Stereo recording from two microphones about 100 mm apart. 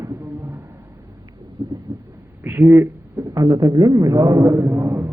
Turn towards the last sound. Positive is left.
turn(degrees=-25)  # may be behind; listen again after turning